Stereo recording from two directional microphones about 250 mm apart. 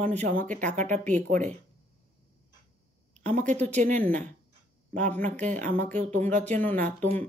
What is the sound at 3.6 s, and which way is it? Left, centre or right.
Speech, centre.